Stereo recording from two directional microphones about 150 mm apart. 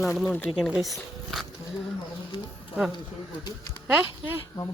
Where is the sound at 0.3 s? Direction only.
15° left (ahead or behind).